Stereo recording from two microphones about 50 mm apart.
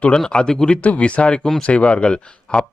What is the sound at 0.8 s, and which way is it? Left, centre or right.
Speech, left.